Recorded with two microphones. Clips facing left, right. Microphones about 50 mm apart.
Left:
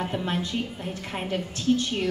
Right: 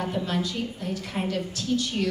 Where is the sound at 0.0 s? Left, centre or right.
Left.